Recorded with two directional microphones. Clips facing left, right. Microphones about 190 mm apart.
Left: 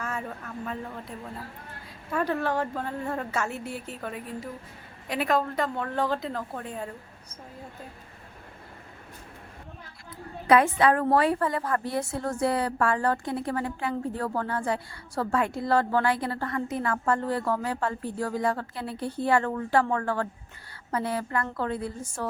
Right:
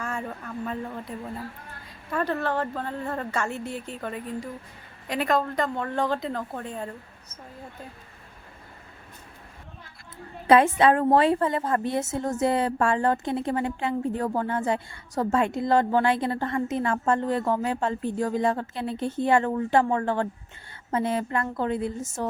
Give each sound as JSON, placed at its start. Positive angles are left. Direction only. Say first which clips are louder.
{"t": 0.0, "sound": "a woman's voice", "louder": "right 2 dB", "side_deg": 0}
{"t": 10.4, "sound": "a woman's voice", "louder": "right 2 dB", "side_deg": -25}